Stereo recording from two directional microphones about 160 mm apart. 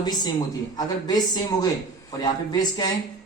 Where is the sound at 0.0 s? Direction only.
25° left (ahead or behind).